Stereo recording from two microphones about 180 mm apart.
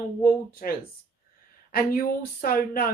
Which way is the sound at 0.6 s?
50° left (ahead or behind).